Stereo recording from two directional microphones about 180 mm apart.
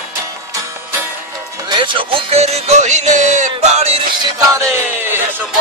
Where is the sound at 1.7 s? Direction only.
30° right (ahead or behind).